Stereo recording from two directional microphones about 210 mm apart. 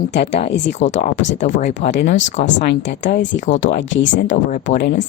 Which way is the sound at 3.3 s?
55° left (ahead or behind).